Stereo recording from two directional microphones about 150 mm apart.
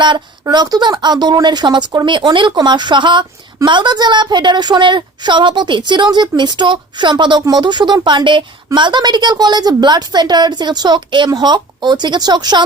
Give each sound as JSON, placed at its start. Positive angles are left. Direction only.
{"t": 0.0, "sound": "a woman's voice", "side_deg": -30}